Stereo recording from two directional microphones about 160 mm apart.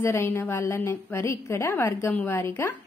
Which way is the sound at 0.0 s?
15° left (ahead or behind).